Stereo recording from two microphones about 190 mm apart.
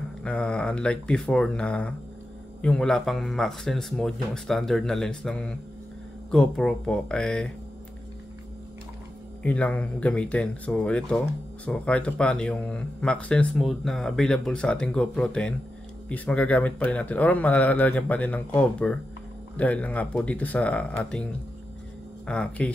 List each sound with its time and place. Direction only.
0.2 s speech: 5° left (ahead or behind)
9.4 s speech: 5° left (ahead or behind)